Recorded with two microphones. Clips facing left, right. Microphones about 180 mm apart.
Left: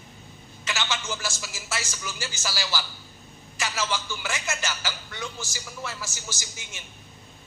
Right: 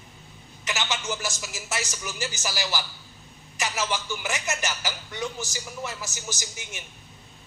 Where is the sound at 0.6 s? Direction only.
15° right (ahead or behind).